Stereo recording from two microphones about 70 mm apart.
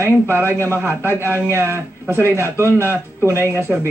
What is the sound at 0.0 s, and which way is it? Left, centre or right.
A man's voice, right.